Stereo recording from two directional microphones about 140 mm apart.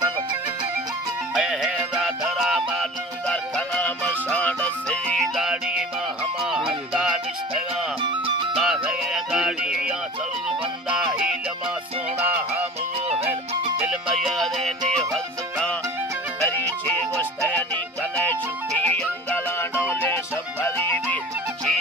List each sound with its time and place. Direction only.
1.3 s music: centre (ahead or behind)
8.0 s music: 35° right (ahead or behind)
8.5 s music: 5° right (ahead or behind)
12.2 s music: 15° right (ahead or behind)
13.8 s music: 5° right (ahead or behind)
17.2 s music: 15° left (ahead or behind)